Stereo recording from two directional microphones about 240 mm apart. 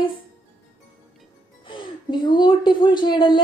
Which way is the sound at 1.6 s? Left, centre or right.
Centre.